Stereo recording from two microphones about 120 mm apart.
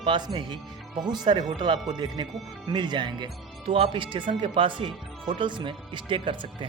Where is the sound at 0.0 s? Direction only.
40° right (ahead or behind).